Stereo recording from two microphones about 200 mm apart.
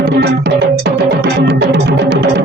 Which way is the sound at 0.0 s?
55° right (ahead or behind).